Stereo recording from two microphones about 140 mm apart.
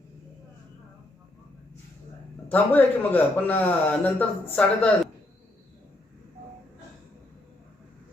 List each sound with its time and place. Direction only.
2.5 s speech: 15° left (ahead or behind)